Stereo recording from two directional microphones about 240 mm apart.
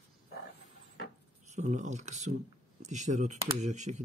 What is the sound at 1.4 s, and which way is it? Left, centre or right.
Speech, right.